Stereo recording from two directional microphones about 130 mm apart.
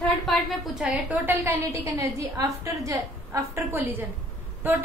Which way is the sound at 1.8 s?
25° right (ahead or behind).